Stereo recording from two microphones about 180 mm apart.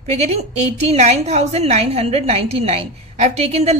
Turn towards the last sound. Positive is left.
turn(degrees=-35)  # may be behind; listen again after turning